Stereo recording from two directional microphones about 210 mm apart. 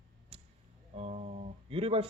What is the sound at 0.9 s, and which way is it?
Speech, 30° right (ahead or behind).